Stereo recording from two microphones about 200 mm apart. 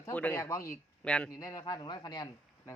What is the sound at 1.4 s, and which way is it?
Speech, 20° left (ahead or behind).